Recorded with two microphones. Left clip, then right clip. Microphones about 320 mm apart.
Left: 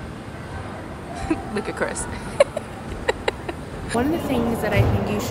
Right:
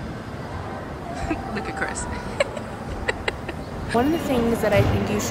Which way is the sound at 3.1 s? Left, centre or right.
Centre.